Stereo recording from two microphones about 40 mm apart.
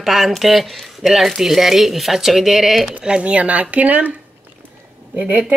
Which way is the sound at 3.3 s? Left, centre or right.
Right.